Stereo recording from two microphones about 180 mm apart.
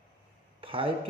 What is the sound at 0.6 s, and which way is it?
Speech, 30° right (ahead or behind).